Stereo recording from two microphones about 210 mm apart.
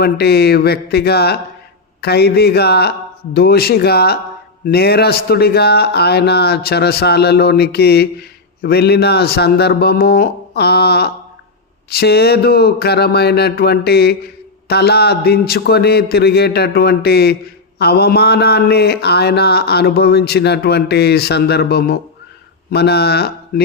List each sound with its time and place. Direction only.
0.0 s a man's voice: 50° left (ahead or behind)